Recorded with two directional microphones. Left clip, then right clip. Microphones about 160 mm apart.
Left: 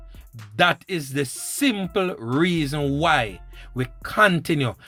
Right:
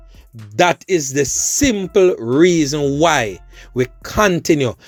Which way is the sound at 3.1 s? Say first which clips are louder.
Right 4 dB; 50° right (ahead or behind).